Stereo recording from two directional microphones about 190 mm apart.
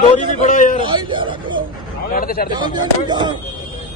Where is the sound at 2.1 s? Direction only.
50° left (ahead or behind).